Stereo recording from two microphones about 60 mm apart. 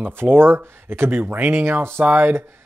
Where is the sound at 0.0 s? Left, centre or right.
Right.